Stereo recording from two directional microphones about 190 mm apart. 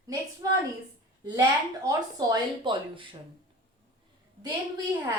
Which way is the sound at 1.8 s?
20° right (ahead or behind).